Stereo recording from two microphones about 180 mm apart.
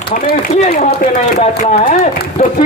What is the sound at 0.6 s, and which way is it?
A man's voice, 40° left (ahead or behind).